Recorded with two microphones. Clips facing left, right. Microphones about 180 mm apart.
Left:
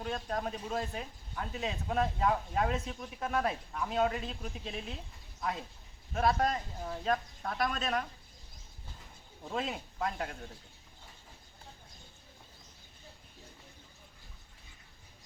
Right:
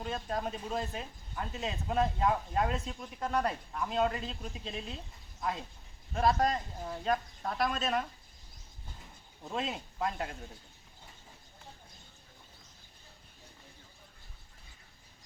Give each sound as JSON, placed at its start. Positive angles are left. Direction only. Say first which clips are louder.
{"t": 0.0, "sound": "speech", "louder": "even", "side_deg": 0}
{"t": 9.5, "sound": "speech", "louder": "even", "side_deg": 0}